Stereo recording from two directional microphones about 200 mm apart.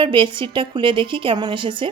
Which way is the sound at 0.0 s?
25° right (ahead or behind).